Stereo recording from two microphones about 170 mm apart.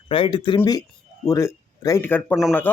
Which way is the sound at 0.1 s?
30° left (ahead or behind).